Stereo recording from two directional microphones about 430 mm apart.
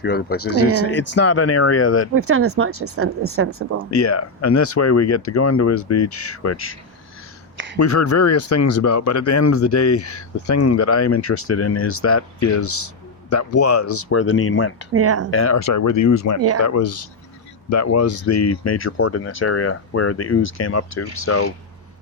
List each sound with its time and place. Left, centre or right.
0.0 s speech: left
2.1 s speech: right
3.9 s speech: left
7.5 s a sound: right
7.8 s speech: left
14.9 s speech: right
15.3 s speech: left